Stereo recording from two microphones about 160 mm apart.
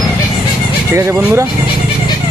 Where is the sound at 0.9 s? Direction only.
20° right (ahead or behind).